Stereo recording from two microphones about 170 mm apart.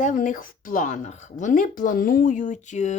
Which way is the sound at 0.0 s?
50° left (ahead or behind).